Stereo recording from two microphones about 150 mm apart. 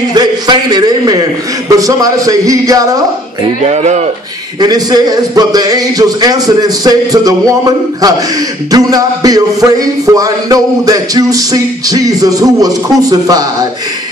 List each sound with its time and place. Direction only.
0.1 s a man's voice: 25° right (ahead or behind)
3.6 s speech: 50° right (ahead or behind)
4.6 s speech: 25° right (ahead or behind)